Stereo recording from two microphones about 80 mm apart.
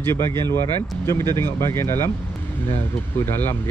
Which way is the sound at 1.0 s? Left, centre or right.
Left.